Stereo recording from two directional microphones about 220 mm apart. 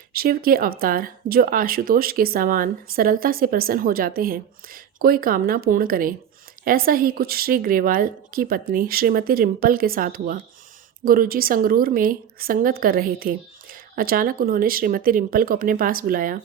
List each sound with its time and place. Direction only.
0.1 s speech: 40° right (ahead or behind)